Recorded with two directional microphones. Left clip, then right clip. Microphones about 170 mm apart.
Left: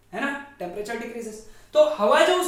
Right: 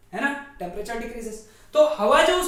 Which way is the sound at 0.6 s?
25° left (ahead or behind).